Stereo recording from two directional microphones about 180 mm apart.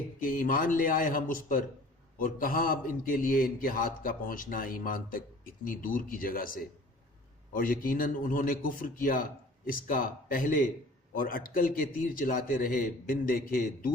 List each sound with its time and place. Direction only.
0.2 s a man's voice: 50° left (ahead or behind)